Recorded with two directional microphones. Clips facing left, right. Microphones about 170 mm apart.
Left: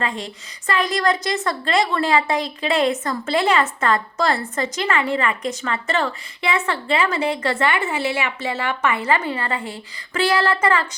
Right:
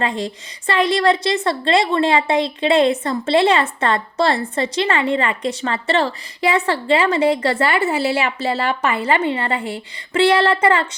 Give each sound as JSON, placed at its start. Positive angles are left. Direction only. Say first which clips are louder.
{"t": 0.0, "sound": "a woman's voice", "louder": "right 4 dB", "side_deg": -30}